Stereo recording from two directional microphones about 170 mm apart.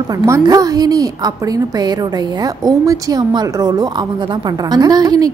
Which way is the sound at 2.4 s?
20° right (ahead or behind).